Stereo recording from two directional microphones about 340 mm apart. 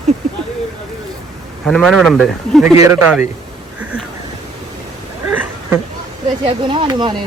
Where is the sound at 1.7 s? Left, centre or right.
Centre.